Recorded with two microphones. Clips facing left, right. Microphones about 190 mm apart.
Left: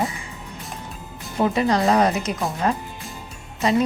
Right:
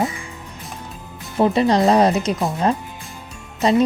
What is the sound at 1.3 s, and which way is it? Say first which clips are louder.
Speech: right 4 dB; 30° right (ahead or behind).